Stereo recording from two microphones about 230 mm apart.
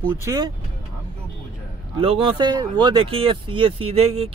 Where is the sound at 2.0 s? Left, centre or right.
Right.